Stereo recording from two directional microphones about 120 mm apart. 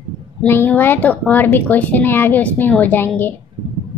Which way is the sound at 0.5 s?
15° left (ahead or behind).